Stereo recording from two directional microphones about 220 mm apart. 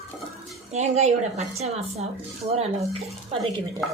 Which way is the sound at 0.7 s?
30° right (ahead or behind).